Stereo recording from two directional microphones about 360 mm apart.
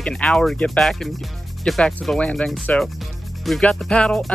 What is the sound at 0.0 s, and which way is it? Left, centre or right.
Speech, centre.